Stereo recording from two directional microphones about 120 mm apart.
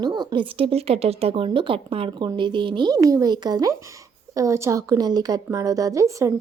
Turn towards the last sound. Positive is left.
turn(degrees=-25)  # may be behind; listen again after turning